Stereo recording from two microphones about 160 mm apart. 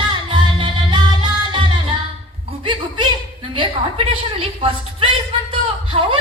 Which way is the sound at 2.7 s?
30° right (ahead or behind).